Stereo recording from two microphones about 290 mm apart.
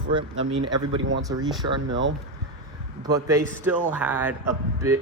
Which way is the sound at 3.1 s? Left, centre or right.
Centre.